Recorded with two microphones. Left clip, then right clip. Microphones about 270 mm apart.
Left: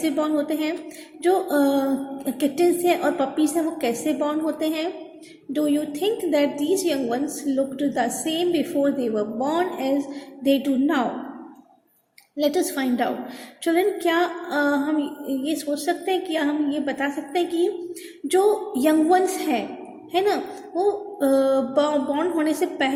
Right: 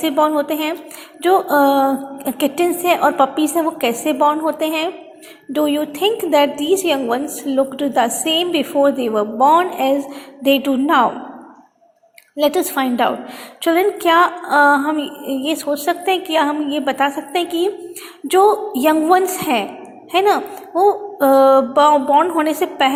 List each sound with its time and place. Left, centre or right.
0.0 s a woman's voice: centre
12.4 s a woman's voice: centre